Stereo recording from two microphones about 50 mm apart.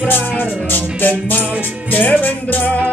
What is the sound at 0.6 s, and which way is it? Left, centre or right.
Music, left.